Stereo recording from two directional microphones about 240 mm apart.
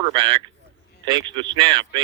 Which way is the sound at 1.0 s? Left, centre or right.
Centre.